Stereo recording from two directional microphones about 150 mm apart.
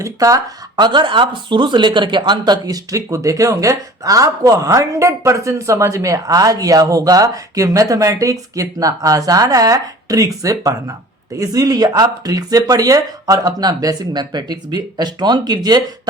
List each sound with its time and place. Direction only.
0.0 s speech: 20° right (ahead or behind)